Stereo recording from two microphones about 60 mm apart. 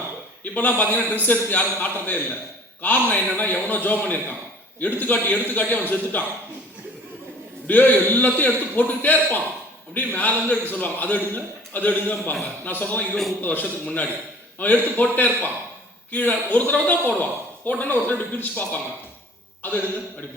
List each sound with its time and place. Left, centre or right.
0.4 s a man's voice: left
7.7 s a man's voice: left